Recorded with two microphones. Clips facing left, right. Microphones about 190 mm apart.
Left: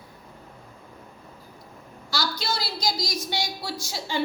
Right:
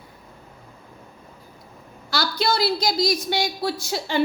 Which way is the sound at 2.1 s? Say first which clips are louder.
Right 6 dB; 60° right (ahead or behind).